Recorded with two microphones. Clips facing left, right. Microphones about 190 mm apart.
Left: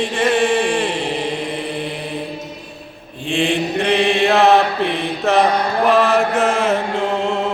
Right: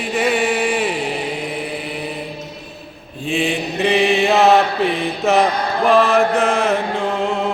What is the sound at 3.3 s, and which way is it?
Mantra, centre (ahead or behind).